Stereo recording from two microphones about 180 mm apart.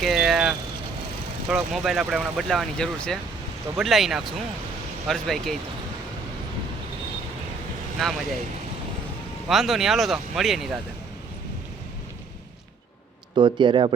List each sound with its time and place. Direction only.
0.0 s vehicle: centre (ahead or behind)
1.5 s speech: centre (ahead or behind)
8.0 s speech: centre (ahead or behind)
9.5 s speech: centre (ahead or behind)
13.3 s speech: 25° right (ahead or behind)